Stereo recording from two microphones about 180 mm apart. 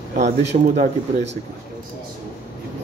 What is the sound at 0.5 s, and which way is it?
Speech, 45° right (ahead or behind).